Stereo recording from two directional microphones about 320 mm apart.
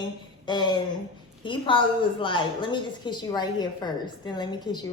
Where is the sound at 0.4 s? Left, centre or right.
Centre.